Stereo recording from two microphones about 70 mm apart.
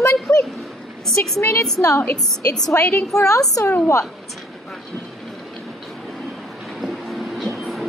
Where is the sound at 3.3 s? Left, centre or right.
Left.